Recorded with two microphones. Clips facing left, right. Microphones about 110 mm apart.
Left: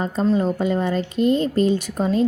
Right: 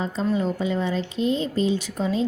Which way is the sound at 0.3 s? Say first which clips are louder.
Left 4 dB; 50° left (ahead or behind).